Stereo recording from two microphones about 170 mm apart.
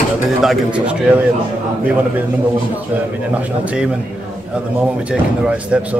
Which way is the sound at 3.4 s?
5° right (ahead or behind).